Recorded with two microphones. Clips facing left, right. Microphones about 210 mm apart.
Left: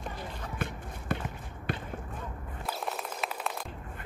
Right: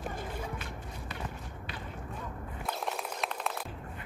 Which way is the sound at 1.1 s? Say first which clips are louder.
Left 10 dB; 50° left (ahead or behind).